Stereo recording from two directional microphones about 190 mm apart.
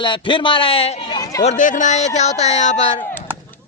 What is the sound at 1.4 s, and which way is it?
Speech, 40° left (ahead or behind).